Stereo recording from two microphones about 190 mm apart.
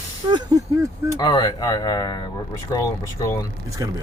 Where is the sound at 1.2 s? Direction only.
20° left (ahead or behind).